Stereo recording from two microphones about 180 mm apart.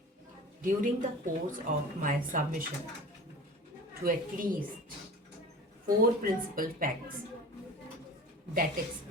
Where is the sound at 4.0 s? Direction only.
50° right (ahead or behind).